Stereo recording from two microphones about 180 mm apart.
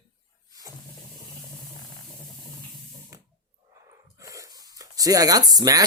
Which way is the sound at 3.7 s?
15° right (ahead or behind).